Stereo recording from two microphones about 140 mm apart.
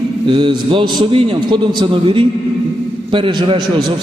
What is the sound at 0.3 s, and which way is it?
A man's voice, 35° right (ahead or behind).